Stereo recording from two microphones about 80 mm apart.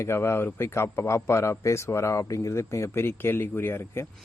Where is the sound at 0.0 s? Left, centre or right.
Left.